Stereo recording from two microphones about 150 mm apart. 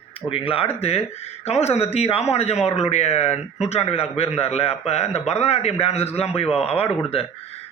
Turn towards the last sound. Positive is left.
turn(degrees=45)  # may be behind; listen again after turning